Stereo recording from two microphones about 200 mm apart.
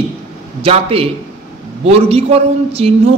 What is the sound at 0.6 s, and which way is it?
A man's voice, 30° right (ahead or behind).